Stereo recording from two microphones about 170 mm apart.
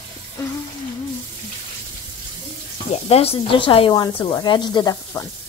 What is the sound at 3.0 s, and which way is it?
Speech, 35° left (ahead or behind).